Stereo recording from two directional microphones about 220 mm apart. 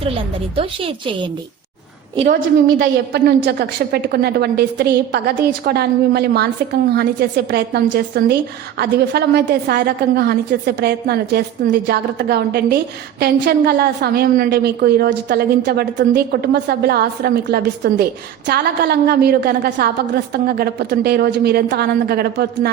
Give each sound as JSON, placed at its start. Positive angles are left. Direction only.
{"t": 0.5, "sound": "a woman's voice", "side_deg": -25}
{"t": 2.1, "sound": "a woman's voice", "side_deg": -35}
{"t": 2.6, "sound": "a woman's voice", "side_deg": -55}